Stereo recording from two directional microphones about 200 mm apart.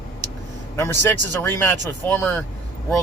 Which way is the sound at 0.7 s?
15° left (ahead or behind).